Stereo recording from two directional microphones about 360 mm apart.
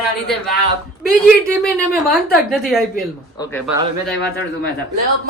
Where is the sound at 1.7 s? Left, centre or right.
Centre.